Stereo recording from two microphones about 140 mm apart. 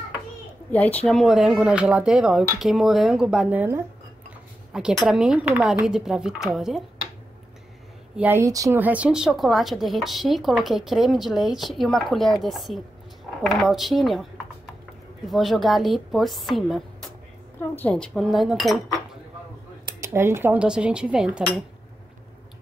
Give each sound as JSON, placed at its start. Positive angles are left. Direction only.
{"t": 0.7, "sound": "a woman's voice", "side_deg": 10}
{"t": 1.0, "sound": "speech", "side_deg": 0}
{"t": 5.0, "sound": "speech", "side_deg": -5}
{"t": 8.2, "sound": "speech", "side_deg": -15}
{"t": 8.7, "sound": "speech", "side_deg": -10}
{"t": 15.2, "sound": "speech", "side_deg": 0}
{"t": 17.6, "sound": "speech", "side_deg": 10}
{"t": 20.0, "sound": "speech", "side_deg": -20}